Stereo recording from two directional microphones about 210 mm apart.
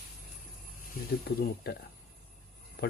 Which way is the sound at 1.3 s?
50° left (ahead or behind).